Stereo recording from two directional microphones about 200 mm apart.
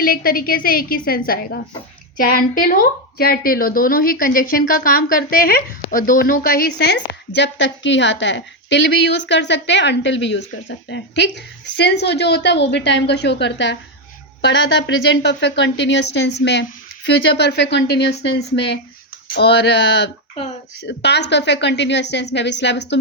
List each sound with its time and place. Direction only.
0.0 s a woman's voice: 45° left (ahead or behind)